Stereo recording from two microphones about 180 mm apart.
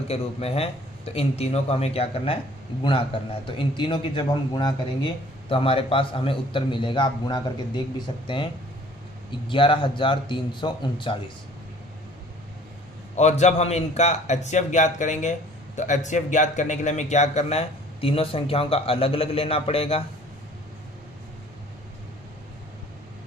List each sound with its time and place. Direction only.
0.1 s a man's voice: 35° left (ahead or behind)
9.5 s a man's voice: 30° left (ahead or behind)
13.1 s a man's voice: 40° left (ahead or behind)